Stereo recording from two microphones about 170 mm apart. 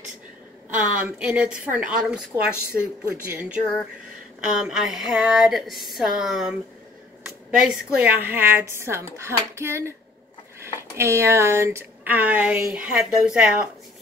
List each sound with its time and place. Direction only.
0.7 s speech: 5° right (ahead or behind)
7.5 s speech: 5° right (ahead or behind)